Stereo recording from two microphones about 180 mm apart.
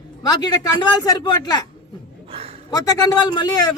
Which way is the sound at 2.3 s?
30° right (ahead or behind).